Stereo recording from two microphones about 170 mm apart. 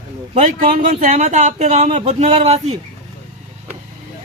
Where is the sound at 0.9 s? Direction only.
45° right (ahead or behind).